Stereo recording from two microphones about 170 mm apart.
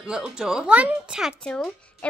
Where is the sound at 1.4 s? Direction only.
5° left (ahead or behind).